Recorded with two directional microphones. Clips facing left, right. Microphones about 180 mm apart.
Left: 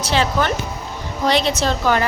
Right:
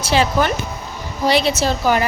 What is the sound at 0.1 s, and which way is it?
A woman's voice, 10° right (ahead or behind).